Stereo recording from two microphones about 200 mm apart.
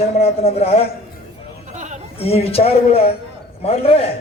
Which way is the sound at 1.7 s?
35° right (ahead or behind).